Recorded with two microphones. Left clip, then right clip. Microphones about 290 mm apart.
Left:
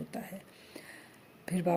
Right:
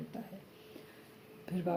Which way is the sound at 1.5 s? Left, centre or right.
Left.